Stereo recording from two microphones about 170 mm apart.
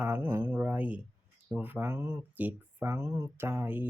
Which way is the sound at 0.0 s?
10° right (ahead or behind).